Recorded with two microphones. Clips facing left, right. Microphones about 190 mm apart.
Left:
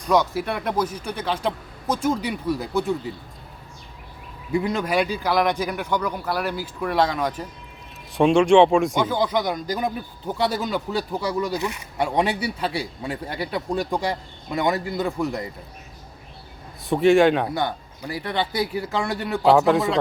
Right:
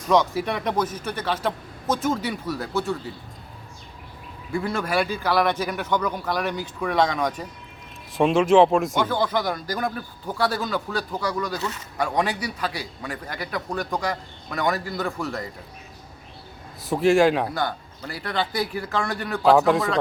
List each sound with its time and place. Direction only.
0.0 s speech: 5° left (ahead or behind)
4.5 s speech: 20° left (ahead or behind); by 9.0 s centre (ahead or behind)
9.0 s a man's voice: 15° left (ahead or behind)
16.8 s speech: centre (ahead or behind)
17.5 s a man's voice: 20° left (ahead or behind)
19.5 s speech: centre (ahead or behind)